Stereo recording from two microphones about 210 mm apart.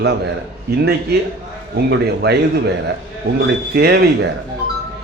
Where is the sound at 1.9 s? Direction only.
50° right (ahead or behind).